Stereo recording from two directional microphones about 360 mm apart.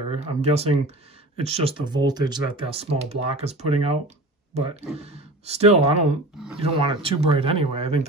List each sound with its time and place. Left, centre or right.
0.1 s speech: centre